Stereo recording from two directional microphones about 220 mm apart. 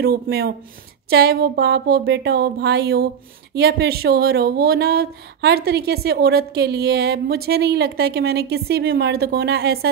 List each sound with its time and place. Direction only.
0.0 s speech: 45° right (ahead or behind)